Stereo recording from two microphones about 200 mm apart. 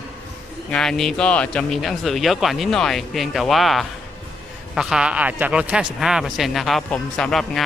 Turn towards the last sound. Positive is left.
turn(degrees=0)  # may be behind; listen again after turning